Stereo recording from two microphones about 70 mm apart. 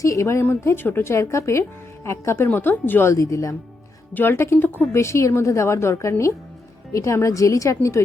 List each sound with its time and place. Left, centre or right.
0.0 s a woman's voice: left
3.1 s a woman's voice: left
4.1 s speech: left
4.9 s a woman's voice: left